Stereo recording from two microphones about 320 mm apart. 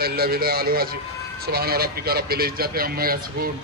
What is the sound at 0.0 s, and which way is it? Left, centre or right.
Speech, right.